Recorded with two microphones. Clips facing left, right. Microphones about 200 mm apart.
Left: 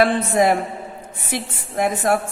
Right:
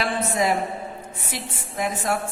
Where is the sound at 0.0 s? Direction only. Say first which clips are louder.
Left 7 dB; 55° left (ahead or behind).